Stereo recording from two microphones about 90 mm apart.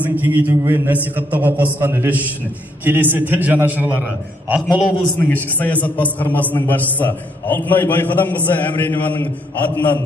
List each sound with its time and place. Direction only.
0.0 s a man's voice: 20° right (ahead or behind)
5.2 s a man's voice: 20° left (ahead or behind)